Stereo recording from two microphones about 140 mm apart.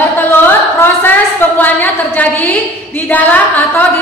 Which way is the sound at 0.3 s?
15° left (ahead or behind).